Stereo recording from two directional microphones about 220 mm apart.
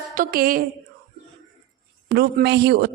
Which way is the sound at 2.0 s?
45° right (ahead or behind).